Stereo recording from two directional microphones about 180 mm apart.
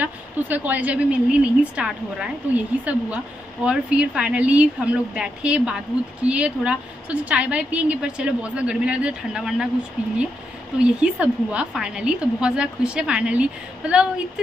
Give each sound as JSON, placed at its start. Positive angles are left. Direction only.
{"t": 0.0, "sound": "a woman's voice", "side_deg": -10}
{"t": 10.8, "sound": "speech", "side_deg": -5}